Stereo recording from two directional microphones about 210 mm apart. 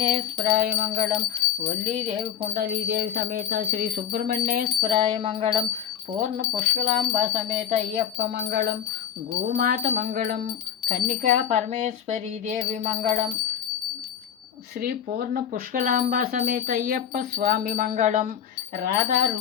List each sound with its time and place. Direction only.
0.0 s jingle bell: 35° right (ahead or behind)
1.6 s speech: 35° right (ahead or behind)
2.8 s speech: 45° right (ahead or behind)
8.4 s speech: 45° right (ahead or behind)
11.0 s speech: 35° right (ahead or behind)
14.8 s speech: 45° right (ahead or behind)